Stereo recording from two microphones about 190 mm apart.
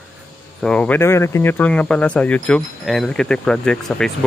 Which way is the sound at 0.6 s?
5° left (ahead or behind).